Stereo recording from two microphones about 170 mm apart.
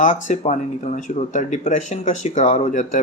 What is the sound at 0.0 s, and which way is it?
Speech, 45° left (ahead or behind).